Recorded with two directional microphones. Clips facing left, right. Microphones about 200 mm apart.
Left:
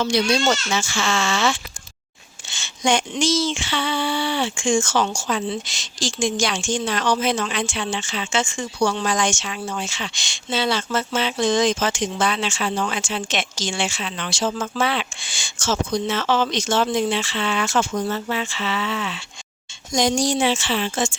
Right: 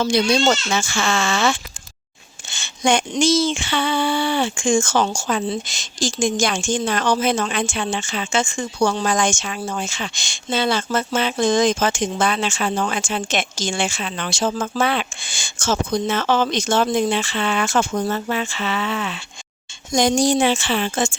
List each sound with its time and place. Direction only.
0.0 s speech: 50° right (ahead or behind)
2.5 s a sound: 55° right (ahead or behind)
3.2 s a woman's voice: 55° right (ahead or behind)